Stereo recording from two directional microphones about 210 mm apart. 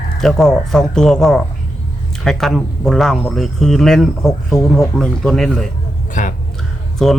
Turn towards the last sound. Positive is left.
turn(degrees=0)  # may be behind; listen again after turning